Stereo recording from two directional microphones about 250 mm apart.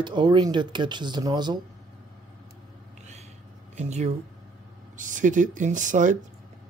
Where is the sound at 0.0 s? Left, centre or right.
Centre.